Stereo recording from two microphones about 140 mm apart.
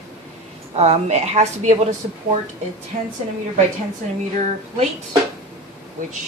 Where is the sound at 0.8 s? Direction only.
50° right (ahead or behind).